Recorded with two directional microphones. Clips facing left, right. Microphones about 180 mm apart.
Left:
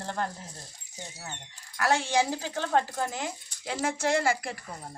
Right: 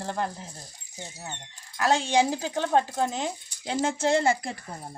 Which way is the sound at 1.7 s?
20° right (ahead or behind).